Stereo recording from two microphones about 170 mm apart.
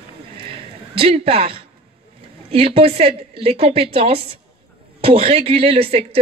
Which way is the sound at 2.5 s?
35° right (ahead or behind).